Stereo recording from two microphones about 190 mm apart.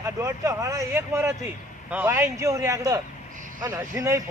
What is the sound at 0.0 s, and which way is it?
Speech, 15° right (ahead or behind).